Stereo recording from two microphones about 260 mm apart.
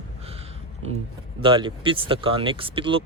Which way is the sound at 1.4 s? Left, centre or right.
Centre.